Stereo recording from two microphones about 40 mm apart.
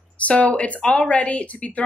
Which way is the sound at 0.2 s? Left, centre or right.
Left.